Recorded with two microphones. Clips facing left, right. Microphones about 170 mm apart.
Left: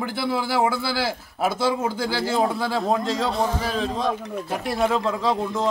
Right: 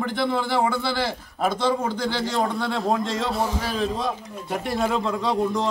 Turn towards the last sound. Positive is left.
turn(degrees=0)  # may be behind; listen again after turning